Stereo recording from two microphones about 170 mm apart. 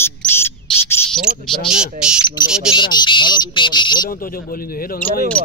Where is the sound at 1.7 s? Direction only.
5° right (ahead or behind).